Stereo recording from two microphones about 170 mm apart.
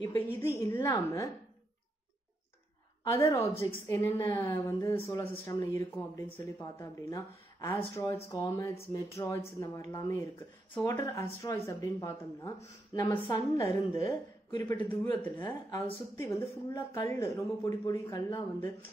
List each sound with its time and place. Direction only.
0.0 s a woman's voice: 15° left (ahead or behind)
3.1 s a woman's voice: 15° left (ahead or behind)
10.7 s a woman's voice: 15° left (ahead or behind)